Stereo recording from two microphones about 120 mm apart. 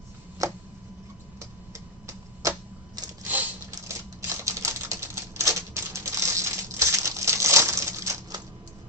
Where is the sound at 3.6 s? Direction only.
25° right (ahead or behind).